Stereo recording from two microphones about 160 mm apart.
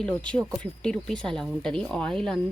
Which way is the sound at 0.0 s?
5° left (ahead or behind).